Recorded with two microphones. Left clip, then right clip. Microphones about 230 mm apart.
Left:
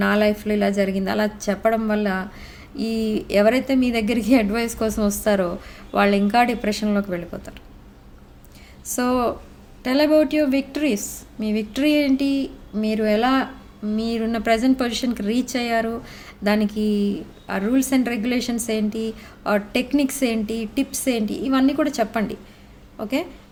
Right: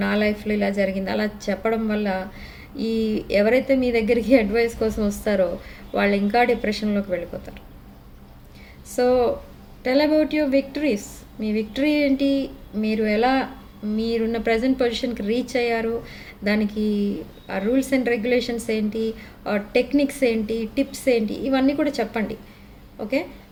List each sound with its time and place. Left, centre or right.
0.0 s a woman's voice: left
9.8 s a woman's voice: left